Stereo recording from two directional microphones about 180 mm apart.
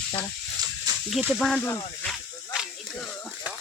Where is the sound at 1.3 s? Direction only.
Centre (ahead or behind).